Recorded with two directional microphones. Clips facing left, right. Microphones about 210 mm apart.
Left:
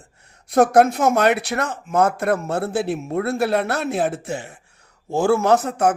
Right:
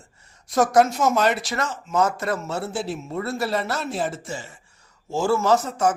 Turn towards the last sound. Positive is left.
turn(degrees=60)  # may be behind; listen again after turning